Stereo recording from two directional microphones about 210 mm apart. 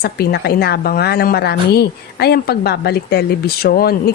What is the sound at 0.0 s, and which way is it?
A woman's voice, 50° left (ahead or behind).